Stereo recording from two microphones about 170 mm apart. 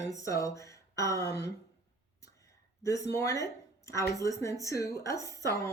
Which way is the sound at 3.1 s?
20° left (ahead or behind).